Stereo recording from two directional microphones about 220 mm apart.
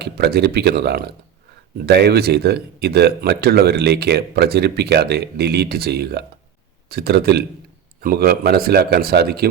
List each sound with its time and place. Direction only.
0.0 s a man's voice: 45° right (ahead or behind)